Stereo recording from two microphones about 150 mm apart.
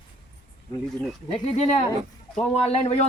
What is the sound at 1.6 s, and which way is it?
Speech, 50° left (ahead or behind).